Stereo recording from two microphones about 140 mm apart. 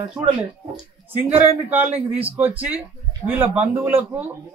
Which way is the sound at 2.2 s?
10° right (ahead or behind).